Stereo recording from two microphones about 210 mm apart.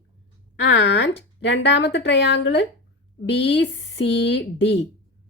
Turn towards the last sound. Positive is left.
turn(degrees=55)  # may be behind; listen again after turning